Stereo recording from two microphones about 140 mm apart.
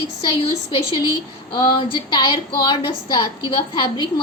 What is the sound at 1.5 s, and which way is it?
A woman's voice, 30° left (ahead or behind).